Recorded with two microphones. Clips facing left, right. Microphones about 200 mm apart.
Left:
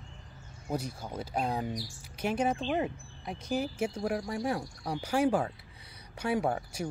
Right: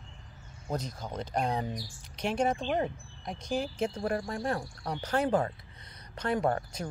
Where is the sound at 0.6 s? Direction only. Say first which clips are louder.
Even; 10° left (ahead or behind).